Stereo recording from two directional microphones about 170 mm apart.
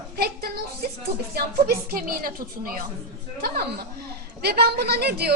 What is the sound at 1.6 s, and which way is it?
A woman's voice, 60° right (ahead or behind).